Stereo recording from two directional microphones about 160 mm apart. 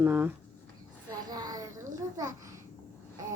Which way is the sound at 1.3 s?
25° right (ahead or behind).